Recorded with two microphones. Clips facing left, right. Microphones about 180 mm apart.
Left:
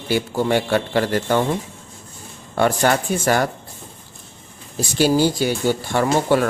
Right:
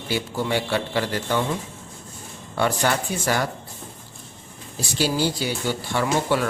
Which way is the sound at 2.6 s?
50° left (ahead or behind).